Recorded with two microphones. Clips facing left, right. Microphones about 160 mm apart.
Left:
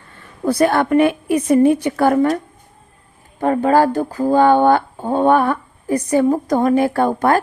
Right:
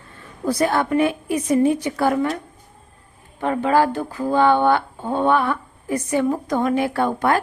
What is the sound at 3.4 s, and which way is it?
A woman's voice, 45° left (ahead or behind).